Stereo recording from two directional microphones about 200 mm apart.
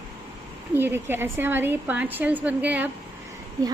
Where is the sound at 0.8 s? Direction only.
10° right (ahead or behind).